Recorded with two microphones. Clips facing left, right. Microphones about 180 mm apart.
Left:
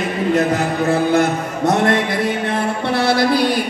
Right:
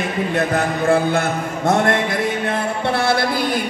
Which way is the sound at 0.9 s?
50° right (ahead or behind).